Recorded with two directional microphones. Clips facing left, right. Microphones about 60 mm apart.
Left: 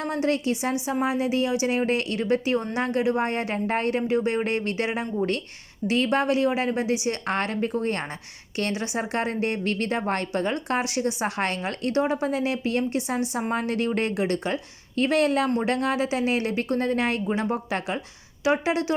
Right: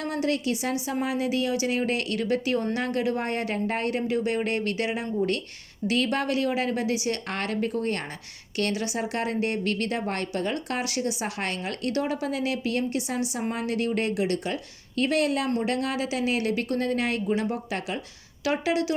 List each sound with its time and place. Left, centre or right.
0.0 s a woman's voice: left